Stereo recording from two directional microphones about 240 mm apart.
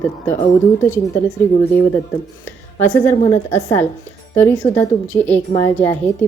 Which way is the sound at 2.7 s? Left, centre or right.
Left.